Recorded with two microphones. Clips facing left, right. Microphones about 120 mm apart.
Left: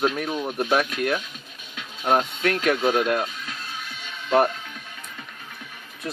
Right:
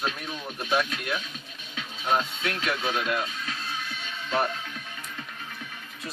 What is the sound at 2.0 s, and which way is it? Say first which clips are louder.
Speech: left 5 dB; 50° left (ahead or behind).